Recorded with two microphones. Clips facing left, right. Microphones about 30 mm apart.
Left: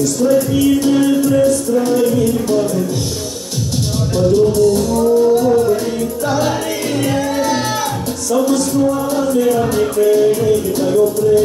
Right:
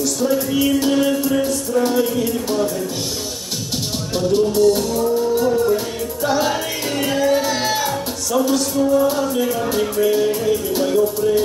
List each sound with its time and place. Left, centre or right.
0.8 s music: centre
6.2 s music: centre
9.4 s music: centre